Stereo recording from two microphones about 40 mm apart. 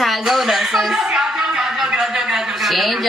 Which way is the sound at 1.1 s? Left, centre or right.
Centre.